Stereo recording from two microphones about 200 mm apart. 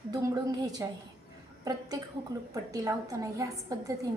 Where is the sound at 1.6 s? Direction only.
15° right (ahead or behind).